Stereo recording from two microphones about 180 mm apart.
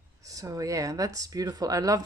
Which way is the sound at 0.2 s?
20° right (ahead or behind).